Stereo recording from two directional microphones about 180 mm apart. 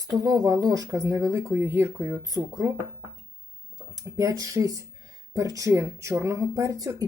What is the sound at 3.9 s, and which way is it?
Speech, 15° right (ahead or behind).